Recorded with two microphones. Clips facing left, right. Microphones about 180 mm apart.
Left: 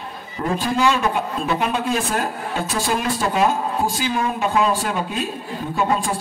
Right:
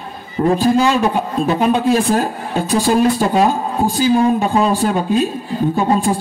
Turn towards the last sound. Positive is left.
turn(degrees=-35)  # may be behind; listen again after turning